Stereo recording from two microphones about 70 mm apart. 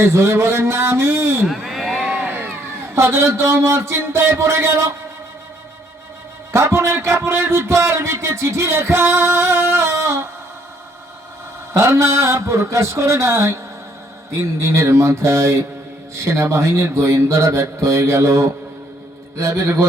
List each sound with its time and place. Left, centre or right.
0.0 s a man's voice: right
1.5 s a sound: centre
2.2 s crowd: right
2.9 s a man's voice: right
6.5 s a man's voice: right
11.8 s mantra: right
14.6 s mantra: right